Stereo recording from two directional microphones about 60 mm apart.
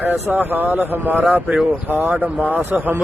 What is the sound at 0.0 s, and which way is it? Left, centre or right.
Speech, right.